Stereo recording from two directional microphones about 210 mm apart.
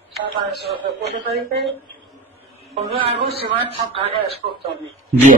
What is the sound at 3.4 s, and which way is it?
A man's voice, 25° right (ahead or behind).